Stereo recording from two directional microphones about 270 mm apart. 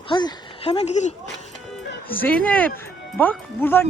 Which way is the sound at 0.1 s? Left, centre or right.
Centre.